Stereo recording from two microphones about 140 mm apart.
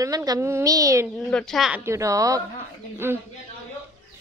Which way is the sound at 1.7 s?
20° right (ahead or behind).